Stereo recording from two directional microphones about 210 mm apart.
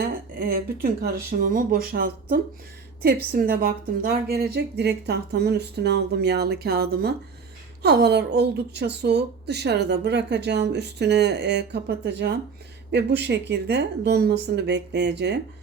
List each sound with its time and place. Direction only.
0.0 s a woman's voice: 45° right (ahead or behind)